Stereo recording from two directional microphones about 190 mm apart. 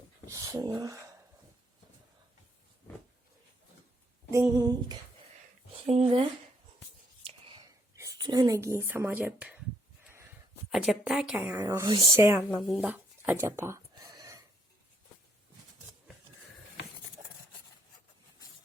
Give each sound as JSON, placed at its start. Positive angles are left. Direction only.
{"t": 0.3, "sound": "speech", "side_deg": -15}
{"t": 4.3, "sound": "speech", "side_deg": -15}
{"t": 5.7, "sound": "speech", "side_deg": -30}
{"t": 7.3, "sound": "whispering", "side_deg": -30}
{"t": 7.9, "sound": "speech", "side_deg": -20}
{"t": 10.7, "sound": "a woman's voice", "side_deg": 0}
{"t": 12.5, "sound": "a sound", "side_deg": 0}